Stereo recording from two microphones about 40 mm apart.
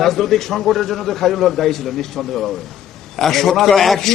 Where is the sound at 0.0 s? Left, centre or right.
Centre.